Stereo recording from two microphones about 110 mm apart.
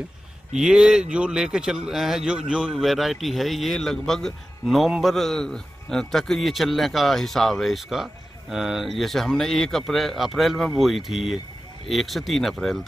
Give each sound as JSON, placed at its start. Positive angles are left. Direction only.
{"t": 0.6, "sound": "a man's voice", "side_deg": -5}